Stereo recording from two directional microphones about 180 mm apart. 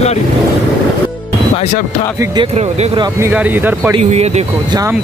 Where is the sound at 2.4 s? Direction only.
35° right (ahead or behind).